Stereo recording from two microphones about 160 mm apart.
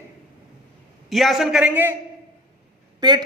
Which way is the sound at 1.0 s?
Centre (ahead or behind).